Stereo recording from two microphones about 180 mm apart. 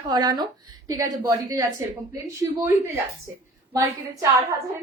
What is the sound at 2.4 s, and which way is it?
Speech, 20° right (ahead or behind).